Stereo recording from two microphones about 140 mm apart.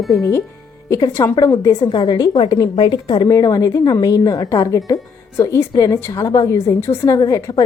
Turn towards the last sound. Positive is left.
turn(degrees=25)  # may be behind; listen again after turning